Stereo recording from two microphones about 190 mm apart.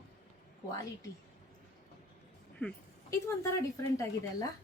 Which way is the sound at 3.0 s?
15° left (ahead or behind).